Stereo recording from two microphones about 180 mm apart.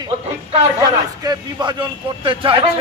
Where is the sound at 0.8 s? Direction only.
20° right (ahead or behind).